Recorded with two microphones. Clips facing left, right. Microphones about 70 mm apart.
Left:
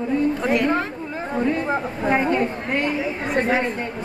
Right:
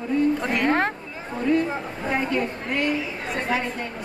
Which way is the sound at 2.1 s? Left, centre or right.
Left.